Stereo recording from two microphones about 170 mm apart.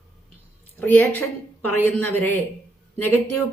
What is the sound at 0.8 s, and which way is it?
A woman's voice, 10° left (ahead or behind).